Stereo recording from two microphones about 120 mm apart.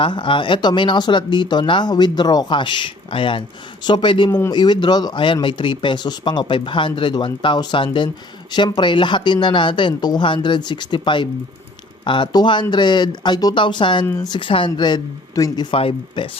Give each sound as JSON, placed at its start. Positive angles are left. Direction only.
{"t": 0.0, "sound": "speech", "side_deg": 40}